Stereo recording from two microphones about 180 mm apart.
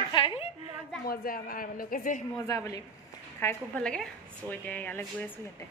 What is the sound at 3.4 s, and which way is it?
A woman's voice, 10° left (ahead or behind).